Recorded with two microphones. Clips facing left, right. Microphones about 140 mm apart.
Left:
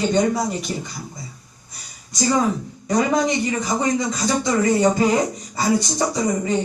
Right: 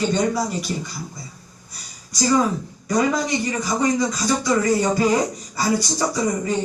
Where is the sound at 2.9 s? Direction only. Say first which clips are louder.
Left 1 dB; 25° left (ahead or behind).